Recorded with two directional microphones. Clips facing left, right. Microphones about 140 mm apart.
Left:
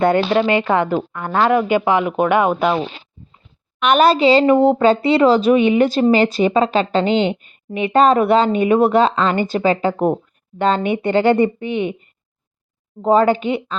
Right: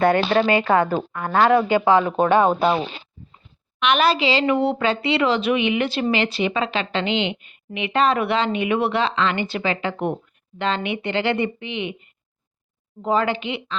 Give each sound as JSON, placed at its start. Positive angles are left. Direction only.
{"t": 0.0, "sound": "a woman's voice", "side_deg": 20}
{"t": 3.8, "sound": "speech", "side_deg": 45}